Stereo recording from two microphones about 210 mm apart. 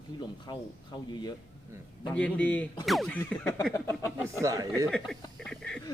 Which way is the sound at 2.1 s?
5° left (ahead or behind).